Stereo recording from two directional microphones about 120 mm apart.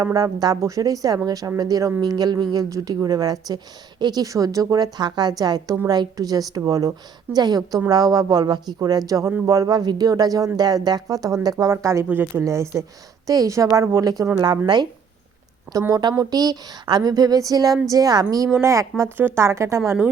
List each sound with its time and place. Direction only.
0.0 s a woman's voice: 30° right (ahead or behind)
12.0 s speech: 15° right (ahead or behind)
12.4 s a woman's voice: 25° right (ahead or behind)
15.9 s a woman's voice: 35° right (ahead or behind)